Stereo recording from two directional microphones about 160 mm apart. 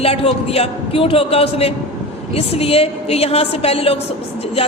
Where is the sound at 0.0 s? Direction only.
40° left (ahead or behind).